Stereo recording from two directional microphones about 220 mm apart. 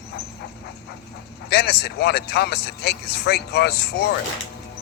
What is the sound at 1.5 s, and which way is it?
Speech, 45° left (ahead or behind).